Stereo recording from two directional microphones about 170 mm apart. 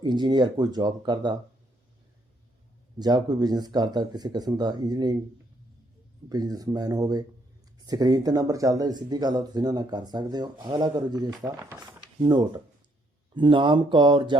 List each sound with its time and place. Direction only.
0.0 s speech: 25° right (ahead or behind)
3.0 s speech: 25° right (ahead or behind)
6.2 s speech: 20° right (ahead or behind)